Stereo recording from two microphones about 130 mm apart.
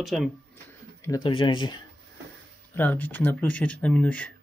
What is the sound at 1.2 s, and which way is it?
Speech, 40° left (ahead or behind).